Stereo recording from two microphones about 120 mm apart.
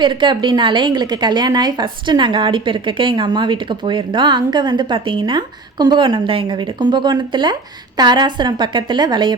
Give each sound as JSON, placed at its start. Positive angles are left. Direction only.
{"t": 0.0, "sound": "a woman's voice", "side_deg": -40}